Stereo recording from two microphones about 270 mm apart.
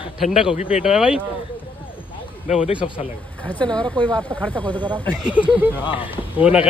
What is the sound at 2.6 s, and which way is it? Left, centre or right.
Speech, left.